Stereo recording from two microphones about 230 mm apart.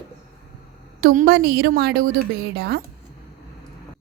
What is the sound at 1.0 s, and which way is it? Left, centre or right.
A woman's voice, right.